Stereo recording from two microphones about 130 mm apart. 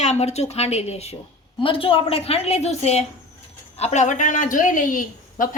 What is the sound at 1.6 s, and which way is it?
A woman's voice, 45° left (ahead or behind).